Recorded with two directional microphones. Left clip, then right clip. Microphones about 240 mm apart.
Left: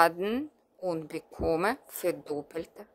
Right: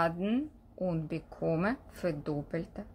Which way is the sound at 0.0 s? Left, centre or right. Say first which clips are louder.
Left 6 dB; left.